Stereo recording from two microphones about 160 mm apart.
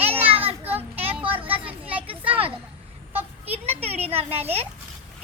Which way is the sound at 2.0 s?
35° right (ahead or behind).